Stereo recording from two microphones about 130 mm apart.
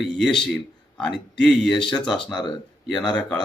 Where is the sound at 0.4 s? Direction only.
5° left (ahead or behind).